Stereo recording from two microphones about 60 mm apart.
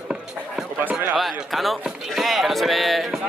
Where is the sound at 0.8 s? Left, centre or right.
Right.